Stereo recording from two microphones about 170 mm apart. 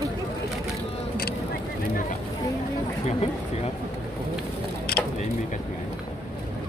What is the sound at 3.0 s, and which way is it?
Speech, 40° left (ahead or behind).